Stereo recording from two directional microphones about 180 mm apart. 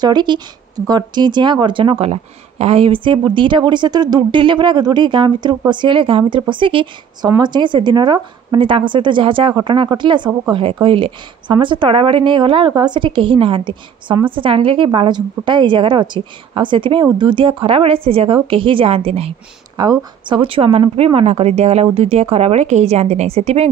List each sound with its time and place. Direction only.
0.0 s a woman's voice: 25° right (ahead or behind)
19.8 s a woman's voice: 20° right (ahead or behind)